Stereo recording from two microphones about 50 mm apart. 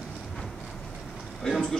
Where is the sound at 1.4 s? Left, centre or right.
Centre.